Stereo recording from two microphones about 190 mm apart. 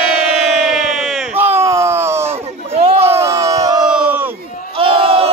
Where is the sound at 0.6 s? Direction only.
Centre (ahead or behind).